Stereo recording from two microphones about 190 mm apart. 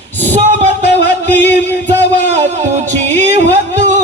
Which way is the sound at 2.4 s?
40° right (ahead or behind).